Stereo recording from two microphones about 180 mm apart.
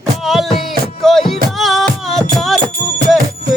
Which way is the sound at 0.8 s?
Centre (ahead or behind).